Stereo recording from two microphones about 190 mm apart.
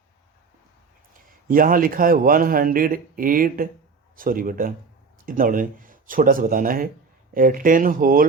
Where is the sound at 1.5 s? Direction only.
50° right (ahead or behind).